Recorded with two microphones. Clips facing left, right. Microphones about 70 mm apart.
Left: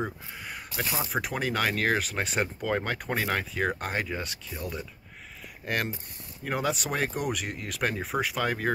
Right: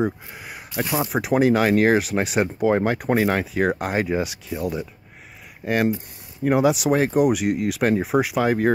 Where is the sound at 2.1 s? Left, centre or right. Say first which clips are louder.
Right 8 dB; centre.